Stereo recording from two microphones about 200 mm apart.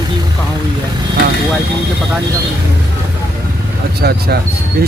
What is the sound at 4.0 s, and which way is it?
Speech, 50° right (ahead or behind).